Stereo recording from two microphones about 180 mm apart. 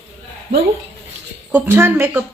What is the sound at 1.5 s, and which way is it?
Speech, 10° right (ahead or behind).